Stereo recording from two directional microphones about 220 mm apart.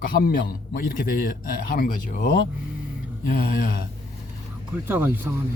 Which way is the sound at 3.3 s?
40° left (ahead or behind).